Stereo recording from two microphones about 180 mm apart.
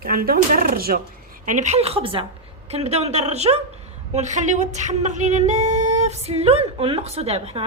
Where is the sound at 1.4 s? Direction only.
40° right (ahead or behind).